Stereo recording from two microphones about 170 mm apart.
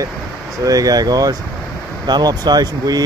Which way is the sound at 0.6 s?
20° right (ahead or behind).